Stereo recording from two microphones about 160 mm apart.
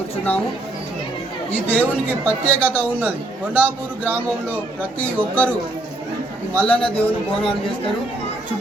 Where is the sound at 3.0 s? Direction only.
10° right (ahead or behind).